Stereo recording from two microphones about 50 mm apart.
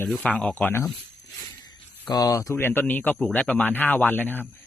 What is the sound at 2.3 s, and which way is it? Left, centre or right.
Speech, left.